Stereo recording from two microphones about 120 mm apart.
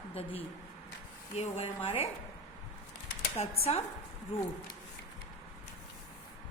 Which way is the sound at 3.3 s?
60° left (ahead or behind).